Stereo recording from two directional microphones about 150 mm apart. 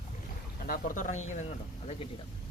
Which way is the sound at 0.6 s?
65° left (ahead or behind).